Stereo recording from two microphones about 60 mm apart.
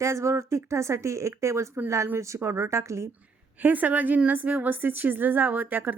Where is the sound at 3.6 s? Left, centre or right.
Right.